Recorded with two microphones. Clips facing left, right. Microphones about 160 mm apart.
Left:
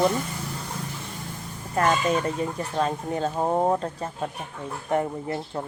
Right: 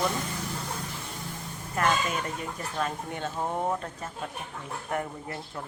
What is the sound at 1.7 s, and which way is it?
Speech, 35° left (ahead or behind).